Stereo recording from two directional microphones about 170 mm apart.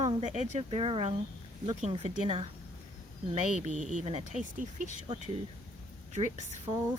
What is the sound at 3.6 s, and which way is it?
Speech, 45° right (ahead or behind).